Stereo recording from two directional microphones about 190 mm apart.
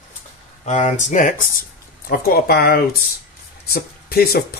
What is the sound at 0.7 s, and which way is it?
Speech, 40° left (ahead or behind).